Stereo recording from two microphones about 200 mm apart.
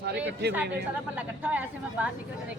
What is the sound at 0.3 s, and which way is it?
Speech, 60° right (ahead or behind).